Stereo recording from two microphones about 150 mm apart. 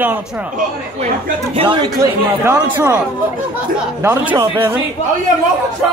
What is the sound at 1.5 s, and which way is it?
Speech, 30° right (ahead or behind).